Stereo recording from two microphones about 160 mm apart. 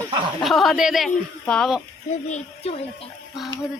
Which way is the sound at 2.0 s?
45° left (ahead or behind).